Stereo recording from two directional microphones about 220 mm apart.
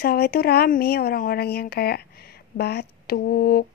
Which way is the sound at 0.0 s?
45° left (ahead or behind).